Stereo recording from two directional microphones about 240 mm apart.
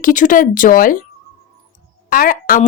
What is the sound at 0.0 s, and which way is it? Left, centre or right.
Speech, left.